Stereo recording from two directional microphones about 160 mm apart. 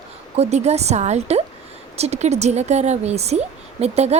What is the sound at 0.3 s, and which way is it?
A woman's voice, 45° right (ahead or behind).